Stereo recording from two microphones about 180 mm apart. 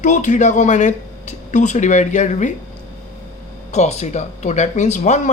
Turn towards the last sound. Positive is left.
turn(degrees=40)  # may be behind; listen again after turning